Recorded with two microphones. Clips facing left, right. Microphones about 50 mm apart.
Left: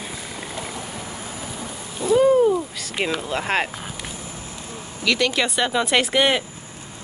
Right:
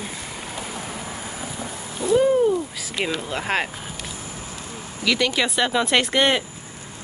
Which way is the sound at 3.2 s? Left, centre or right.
Centre.